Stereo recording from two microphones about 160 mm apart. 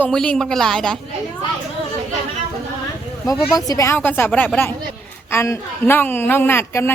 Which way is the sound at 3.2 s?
20° left (ahead or behind).